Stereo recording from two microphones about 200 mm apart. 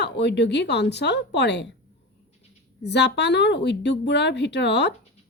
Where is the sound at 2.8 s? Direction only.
60° left (ahead or behind).